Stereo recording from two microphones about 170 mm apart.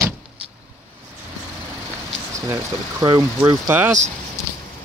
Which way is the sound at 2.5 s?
20° right (ahead or behind).